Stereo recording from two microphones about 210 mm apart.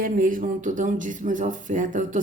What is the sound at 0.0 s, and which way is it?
Speech, 40° right (ahead or behind).